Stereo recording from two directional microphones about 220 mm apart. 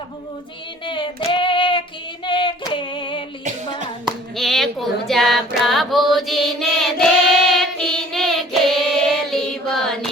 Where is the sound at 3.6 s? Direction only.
25° left (ahead or behind).